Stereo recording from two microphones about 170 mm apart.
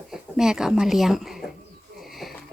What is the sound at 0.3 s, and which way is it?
A woman's voice, 5° right (ahead or behind).